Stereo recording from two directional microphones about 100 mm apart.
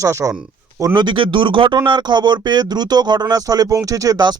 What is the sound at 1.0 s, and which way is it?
Speech, 50° right (ahead or behind).